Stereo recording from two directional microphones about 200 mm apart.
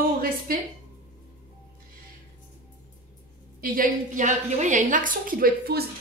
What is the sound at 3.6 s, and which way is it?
A woman's voice, 40° right (ahead or behind).